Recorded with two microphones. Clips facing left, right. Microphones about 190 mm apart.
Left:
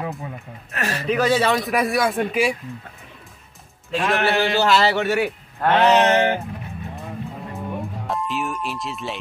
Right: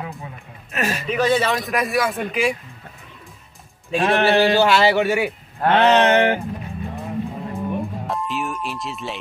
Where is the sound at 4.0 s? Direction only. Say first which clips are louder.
Right 4 dB; 30° right (ahead or behind).